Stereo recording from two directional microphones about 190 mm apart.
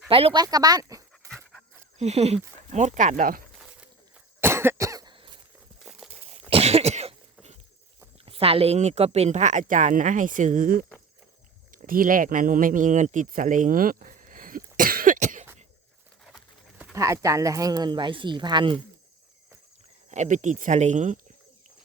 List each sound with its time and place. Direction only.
0.1 s speech: 30° right (ahead or behind)
0.4 s speech: 20° right (ahead or behind)
2.0 s speech: 35° right (ahead or behind)
3.6 s a sound: 5° right (ahead or behind)
4.4 s cough: 15° right (ahead or behind)
5.8 s a sound: centre (ahead or behind)
6.5 s cough: 30° right (ahead or behind)
8.2 s speech: 30° right (ahead or behind)
16.2 s horse: 5° right (ahead or behind)
16.9 s speech: 15° right (ahead or behind)
20.1 s speech: 40° right (ahead or behind)